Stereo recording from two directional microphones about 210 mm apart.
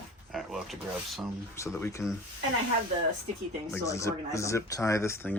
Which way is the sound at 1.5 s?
15° left (ahead or behind).